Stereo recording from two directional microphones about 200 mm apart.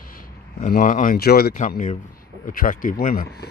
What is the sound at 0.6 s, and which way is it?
Speech, 40° left (ahead or behind).